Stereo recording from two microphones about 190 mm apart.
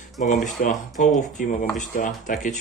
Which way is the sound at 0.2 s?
40° left (ahead or behind).